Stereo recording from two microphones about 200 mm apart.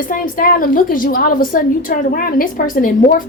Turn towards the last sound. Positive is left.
turn(degrees=45)  # may be behind; listen again after turning